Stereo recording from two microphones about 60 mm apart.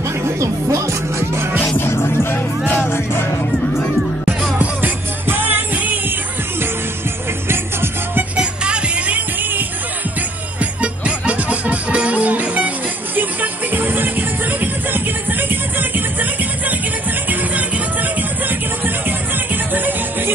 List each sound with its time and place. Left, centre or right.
0.4 s music: right
1.8 s music: left
4.6 s music: right
7.4 s music: right
8.4 s music: centre
19.0 s music: right